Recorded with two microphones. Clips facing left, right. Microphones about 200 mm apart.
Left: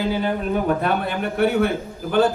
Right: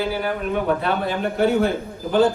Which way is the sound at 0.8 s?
55° left (ahead or behind).